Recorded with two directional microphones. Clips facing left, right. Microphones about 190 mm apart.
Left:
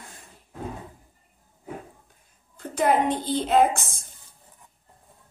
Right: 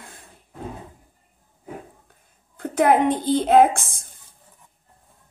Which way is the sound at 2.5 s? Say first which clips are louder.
Right 4 dB; 55° right (ahead or behind).